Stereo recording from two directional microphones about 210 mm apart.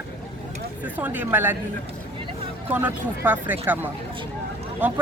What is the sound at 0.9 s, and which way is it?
Speech, 10° right (ahead or behind).